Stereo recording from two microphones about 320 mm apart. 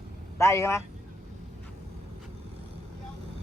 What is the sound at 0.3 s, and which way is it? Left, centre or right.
Speech, centre.